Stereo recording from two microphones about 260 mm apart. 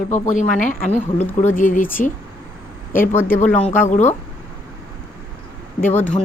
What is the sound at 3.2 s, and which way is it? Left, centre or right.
Speech, left.